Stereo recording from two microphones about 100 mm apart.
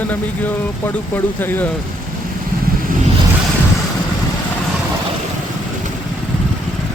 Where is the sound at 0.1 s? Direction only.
20° left (ahead or behind).